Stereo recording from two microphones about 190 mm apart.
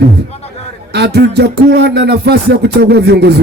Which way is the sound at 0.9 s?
60° right (ahead or behind).